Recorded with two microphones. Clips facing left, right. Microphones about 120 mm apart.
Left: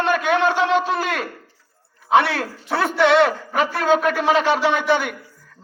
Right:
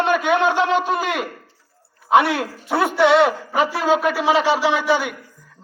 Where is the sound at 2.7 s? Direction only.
5° right (ahead or behind).